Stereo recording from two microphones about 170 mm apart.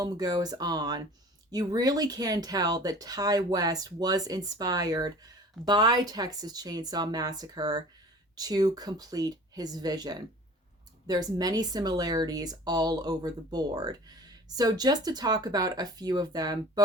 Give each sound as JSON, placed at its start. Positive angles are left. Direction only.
{"t": 0.0, "sound": "speech", "side_deg": -25}